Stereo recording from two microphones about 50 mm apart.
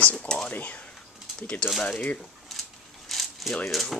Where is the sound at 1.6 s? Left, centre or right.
Left.